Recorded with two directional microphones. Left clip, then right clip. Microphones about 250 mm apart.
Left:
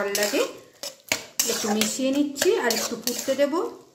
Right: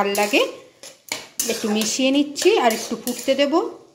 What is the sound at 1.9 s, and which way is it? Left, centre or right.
A woman's voice, centre.